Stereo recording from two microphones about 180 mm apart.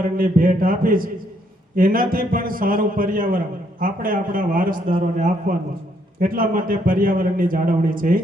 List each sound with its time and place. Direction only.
0.2 s a man's voice: 50° right (ahead or behind)
4.9 s a man's voice: 40° right (ahead or behind)
6.1 s a man's voice: 50° right (ahead or behind)